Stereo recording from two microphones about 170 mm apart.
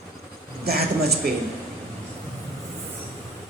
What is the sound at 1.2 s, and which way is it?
Speech, 65° right (ahead or behind).